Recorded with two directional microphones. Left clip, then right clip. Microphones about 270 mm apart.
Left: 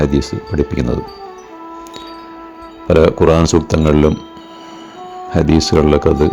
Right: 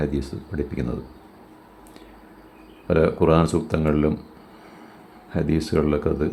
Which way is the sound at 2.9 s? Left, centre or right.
Left.